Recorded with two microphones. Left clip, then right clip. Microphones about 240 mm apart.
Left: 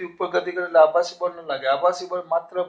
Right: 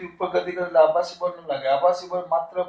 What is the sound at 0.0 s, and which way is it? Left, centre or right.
A man's voice, left.